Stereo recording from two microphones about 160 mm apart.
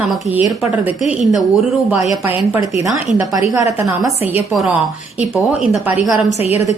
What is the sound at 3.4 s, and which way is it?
A woman's voice, 20° right (ahead or behind).